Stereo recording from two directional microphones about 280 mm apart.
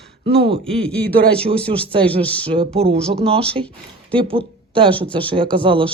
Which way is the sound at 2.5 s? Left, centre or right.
Centre.